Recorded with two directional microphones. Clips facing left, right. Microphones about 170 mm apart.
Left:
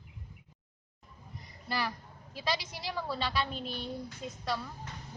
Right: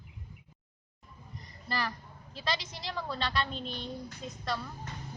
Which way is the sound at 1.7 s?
5° left (ahead or behind).